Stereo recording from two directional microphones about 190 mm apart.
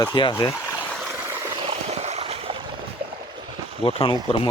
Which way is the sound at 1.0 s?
10° right (ahead or behind).